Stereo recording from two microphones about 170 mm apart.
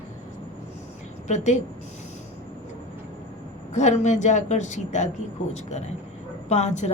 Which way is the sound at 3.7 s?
45° left (ahead or behind).